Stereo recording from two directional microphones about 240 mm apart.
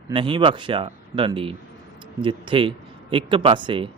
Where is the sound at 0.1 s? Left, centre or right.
Right.